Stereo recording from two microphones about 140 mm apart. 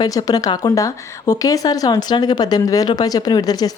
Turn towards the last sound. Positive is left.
turn(degrees=25)  # may be behind; listen again after turning